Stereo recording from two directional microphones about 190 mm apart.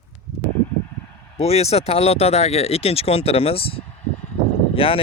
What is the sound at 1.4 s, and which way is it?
Speech, 30° left (ahead or behind).